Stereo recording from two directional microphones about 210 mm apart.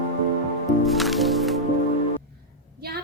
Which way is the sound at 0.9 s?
Centre (ahead or behind).